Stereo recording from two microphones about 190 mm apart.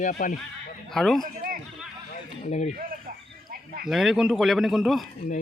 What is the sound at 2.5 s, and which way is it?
Speech, 40° left (ahead or behind).